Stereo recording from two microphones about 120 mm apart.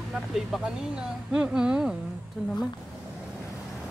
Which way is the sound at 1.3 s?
5° right (ahead or behind).